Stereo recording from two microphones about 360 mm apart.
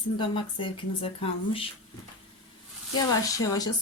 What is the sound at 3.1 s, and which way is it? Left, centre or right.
Speech, centre.